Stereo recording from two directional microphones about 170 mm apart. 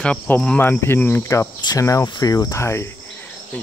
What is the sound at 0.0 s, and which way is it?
Speech, 5° left (ahead or behind).